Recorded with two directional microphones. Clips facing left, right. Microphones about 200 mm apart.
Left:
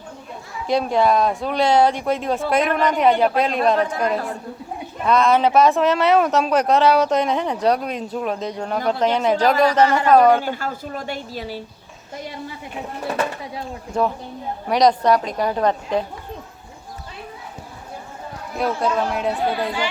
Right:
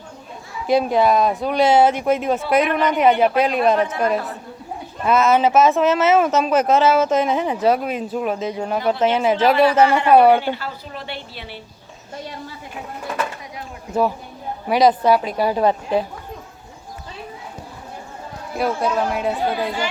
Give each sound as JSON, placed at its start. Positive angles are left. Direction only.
{"t": 0.7, "sound": "speech", "side_deg": -5}
{"t": 5.0, "sound": "speech", "side_deg": -5}
{"t": 10.4, "sound": "speech", "side_deg": 45}
{"t": 13.1, "sound": "a sound", "side_deg": 30}
{"t": 14.7, "sound": "speech", "side_deg": -5}
{"t": 18.5, "sound": "speech", "side_deg": -5}